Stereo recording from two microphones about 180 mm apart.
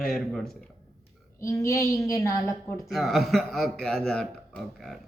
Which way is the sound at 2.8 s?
Centre (ahead or behind).